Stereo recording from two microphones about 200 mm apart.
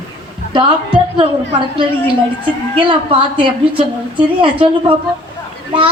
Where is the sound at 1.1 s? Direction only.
25° right (ahead or behind).